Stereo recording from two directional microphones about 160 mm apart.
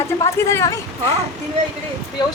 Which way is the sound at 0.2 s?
20° left (ahead or behind).